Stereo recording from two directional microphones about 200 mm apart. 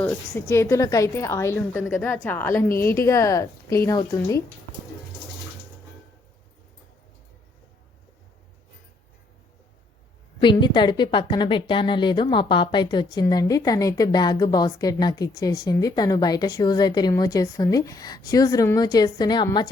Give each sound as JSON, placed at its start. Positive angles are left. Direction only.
{"t": 0.0, "sound": "a woman's voice", "side_deg": 10}
{"t": 10.4, "sound": "a woman's voice", "side_deg": 20}